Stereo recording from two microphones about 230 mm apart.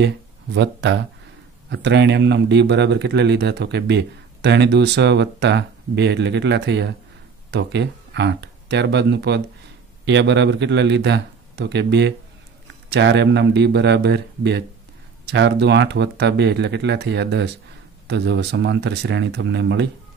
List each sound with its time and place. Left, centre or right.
0.6 s a man's voice: right